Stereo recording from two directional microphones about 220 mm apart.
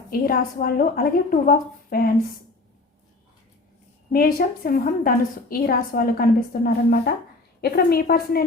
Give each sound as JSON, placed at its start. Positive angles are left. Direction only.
{"t": 0.1, "sound": "a woman's voice", "side_deg": 40}
{"t": 4.1, "sound": "a woman's voice", "side_deg": 40}